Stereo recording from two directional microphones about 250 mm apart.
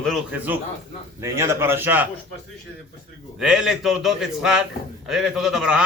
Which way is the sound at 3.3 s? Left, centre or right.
Centre.